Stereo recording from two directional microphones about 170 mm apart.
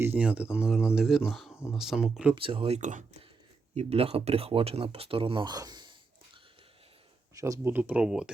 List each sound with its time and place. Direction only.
0.0 s speech: 10° right (ahead or behind)
2.3 s speech: 30° right (ahead or behind); by 8.3 s 5° right (ahead or behind)